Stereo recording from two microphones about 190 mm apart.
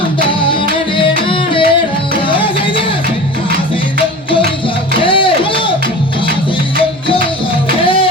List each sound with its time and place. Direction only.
0.9 s music: 25° left (ahead or behind)
5.0 s music: 25° left (ahead or behind)
7.9 s music: 25° left (ahead or behind)